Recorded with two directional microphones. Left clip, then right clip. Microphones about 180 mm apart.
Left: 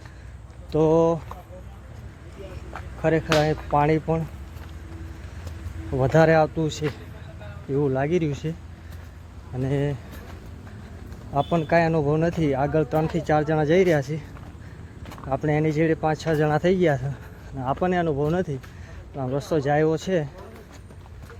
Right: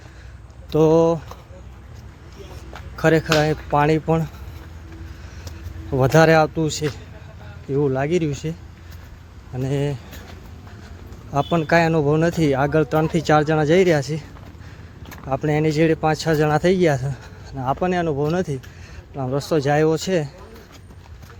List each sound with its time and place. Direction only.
0.7 s speech: 15° right (ahead or behind)
3.0 s speech: 20° right (ahead or behind)
5.9 s speech: 15° right (ahead or behind)
9.6 s speech: 10° right (ahead or behind)
11.3 s speech: 15° right (ahead or behind)
15.3 s speech: 10° right (ahead or behind)